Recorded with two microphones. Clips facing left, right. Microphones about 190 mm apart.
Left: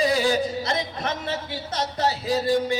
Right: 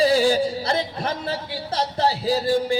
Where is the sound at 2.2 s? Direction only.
30° right (ahead or behind).